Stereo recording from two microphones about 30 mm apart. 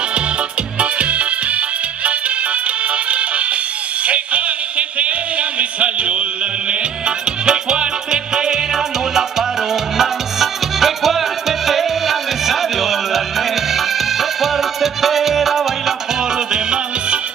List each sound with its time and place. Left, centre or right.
0.7 s music: right
2.9 s music: right
4.0 s a sound: right
6.7 s music: right
9.9 s music: centre
16.5 s music: right